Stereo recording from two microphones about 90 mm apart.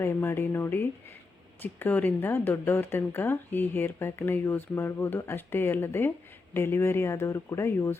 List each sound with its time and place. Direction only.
0.0 s speech: 25° left (ahead or behind)